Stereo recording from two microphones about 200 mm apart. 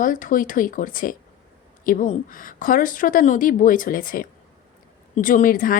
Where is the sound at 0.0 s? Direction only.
40° left (ahead or behind).